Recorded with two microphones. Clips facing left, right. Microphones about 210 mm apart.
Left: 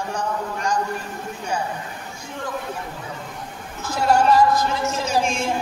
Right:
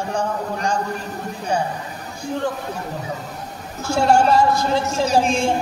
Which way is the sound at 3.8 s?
30° right (ahead or behind).